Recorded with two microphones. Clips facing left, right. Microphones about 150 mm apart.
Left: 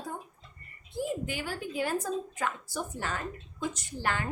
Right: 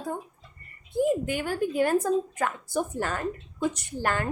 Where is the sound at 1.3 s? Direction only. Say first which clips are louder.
Right 8 dB; 50° right (ahead or behind).